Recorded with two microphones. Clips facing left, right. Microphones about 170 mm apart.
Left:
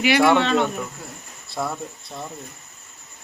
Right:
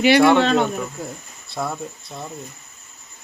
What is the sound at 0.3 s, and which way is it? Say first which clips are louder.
Speech: right 3 dB; 35° right (ahead or behind).